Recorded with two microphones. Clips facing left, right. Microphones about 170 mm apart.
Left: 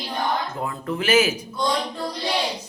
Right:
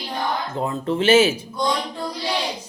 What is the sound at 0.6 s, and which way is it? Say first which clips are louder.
Speech: right 5 dB; 25° right (ahead or behind).